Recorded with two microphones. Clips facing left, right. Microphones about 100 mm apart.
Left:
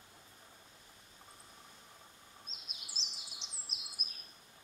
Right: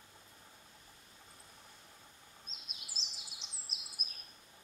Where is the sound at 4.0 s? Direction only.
40° right (ahead or behind).